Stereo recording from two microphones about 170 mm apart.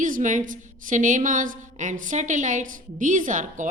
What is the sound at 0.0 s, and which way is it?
A woman's voice, 50° right (ahead or behind).